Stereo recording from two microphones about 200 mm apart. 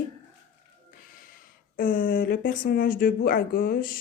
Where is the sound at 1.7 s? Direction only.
45° left (ahead or behind).